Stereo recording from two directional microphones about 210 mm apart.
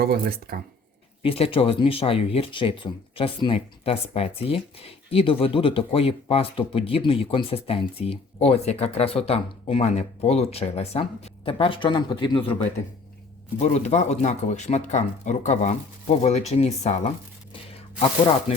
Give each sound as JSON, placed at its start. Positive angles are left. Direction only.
{"t": 0.0, "sound": "speech", "side_deg": -45}
{"t": 1.2, "sound": "speech", "side_deg": 25}
{"t": 13.6, "sound": "speech", "side_deg": 35}